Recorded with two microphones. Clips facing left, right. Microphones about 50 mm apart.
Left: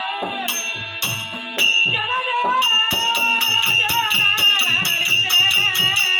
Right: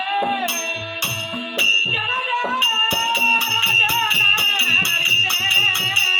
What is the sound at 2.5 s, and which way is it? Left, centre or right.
Music, right.